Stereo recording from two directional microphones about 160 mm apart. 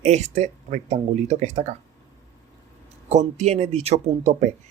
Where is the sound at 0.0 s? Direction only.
45° right (ahead or behind).